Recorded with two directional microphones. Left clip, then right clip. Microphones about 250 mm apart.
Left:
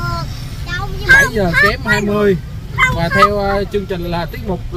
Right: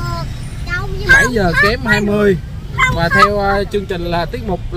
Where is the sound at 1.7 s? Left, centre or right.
Centre.